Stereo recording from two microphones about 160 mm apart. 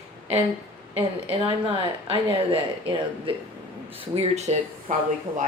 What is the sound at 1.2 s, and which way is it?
Speech, 35° right (ahead or behind).